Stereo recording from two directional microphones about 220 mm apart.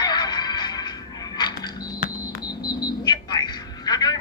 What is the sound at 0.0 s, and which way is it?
Music, 20° left (ahead or behind).